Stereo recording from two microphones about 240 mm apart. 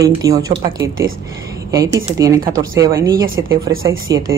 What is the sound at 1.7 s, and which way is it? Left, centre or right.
Speech, centre.